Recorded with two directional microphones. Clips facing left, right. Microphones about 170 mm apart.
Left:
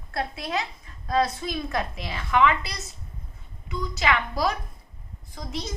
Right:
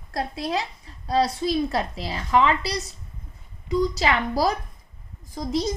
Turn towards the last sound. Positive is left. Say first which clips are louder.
# right 9 dB
turn(degrees=-40)  # may be behind; listen again after turning